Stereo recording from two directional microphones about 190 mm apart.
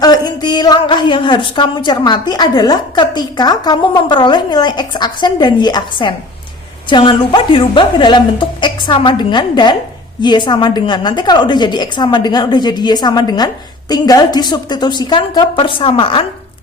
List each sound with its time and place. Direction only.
0.0 s a woman's voice: 20° left (ahead or behind)